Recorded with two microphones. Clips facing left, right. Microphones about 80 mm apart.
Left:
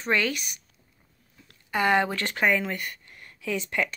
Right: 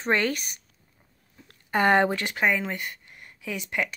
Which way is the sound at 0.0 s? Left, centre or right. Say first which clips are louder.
Right 1 dB; right.